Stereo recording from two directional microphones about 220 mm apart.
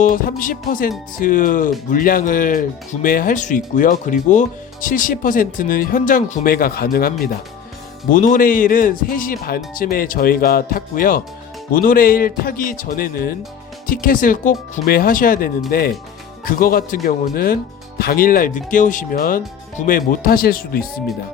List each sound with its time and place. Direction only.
0.0 s speech: 40° left (ahead or behind)
8.1 s speech: 35° left (ahead or behind)